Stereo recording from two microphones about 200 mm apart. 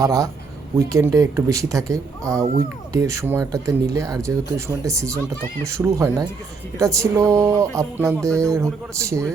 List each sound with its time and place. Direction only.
0.0 s speech: 15° right (ahead or behind)